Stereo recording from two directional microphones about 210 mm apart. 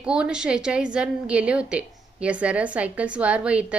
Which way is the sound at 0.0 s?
5° right (ahead or behind).